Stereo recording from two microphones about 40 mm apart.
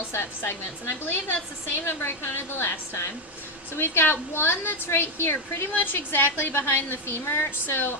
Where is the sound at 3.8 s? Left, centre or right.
Left.